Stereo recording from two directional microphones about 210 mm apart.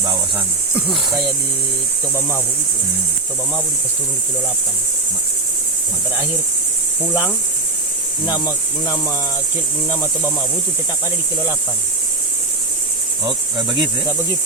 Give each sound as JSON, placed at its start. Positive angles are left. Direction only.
{"t": 0.0, "sound": "cricket", "side_deg": -15}
{"t": 13.2, "sound": "insect", "side_deg": -20}